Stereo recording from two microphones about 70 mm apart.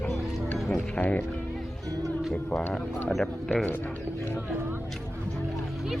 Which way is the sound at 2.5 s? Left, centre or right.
Centre.